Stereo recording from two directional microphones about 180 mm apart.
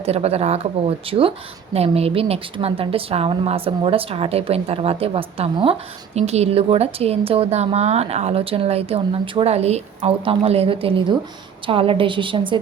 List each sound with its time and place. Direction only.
0.0 s a woman's voice: 35° right (ahead or behind)